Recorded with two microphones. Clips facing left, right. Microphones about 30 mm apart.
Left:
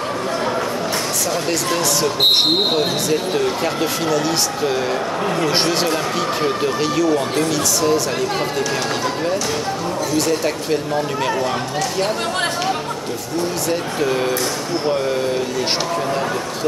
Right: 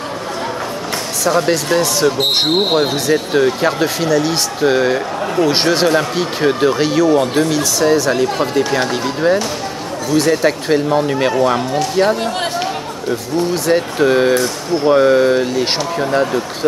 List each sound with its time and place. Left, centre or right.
4.6 s speech: right
6.1 s speech: right
13.7 s speech: right